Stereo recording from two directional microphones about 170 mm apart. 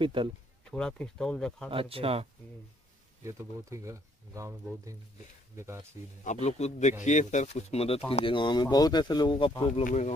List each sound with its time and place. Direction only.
0.0 s speech: 30° right (ahead or behind)
0.7 s speech: 5° left (ahead or behind)
1.7 s speech: 35° right (ahead or behind)
3.3 s speech: 15° right (ahead or behind)
6.2 s a man's voice: 40° left (ahead or behind)
9.8 s a man's voice: 40° left (ahead or behind)